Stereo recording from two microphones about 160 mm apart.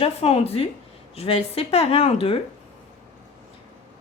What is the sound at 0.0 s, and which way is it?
A woman's voice, 40° left (ahead or behind).